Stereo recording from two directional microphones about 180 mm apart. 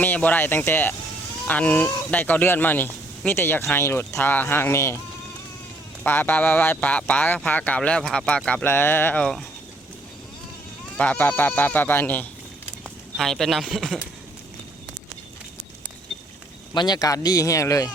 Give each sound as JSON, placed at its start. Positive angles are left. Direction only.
{"t": 0.0, "sound": "speech", "side_deg": 10}
{"t": 6.0, "sound": "speech", "side_deg": 10}
{"t": 10.9, "sound": "speech", "side_deg": 5}
{"t": 16.7, "sound": "speech", "side_deg": 25}